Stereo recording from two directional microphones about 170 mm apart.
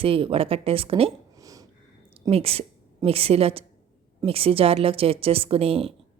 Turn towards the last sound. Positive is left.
turn(degrees=-35)  # may be behind; listen again after turning